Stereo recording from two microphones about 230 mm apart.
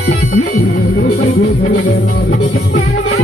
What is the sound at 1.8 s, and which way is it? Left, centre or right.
Music, left.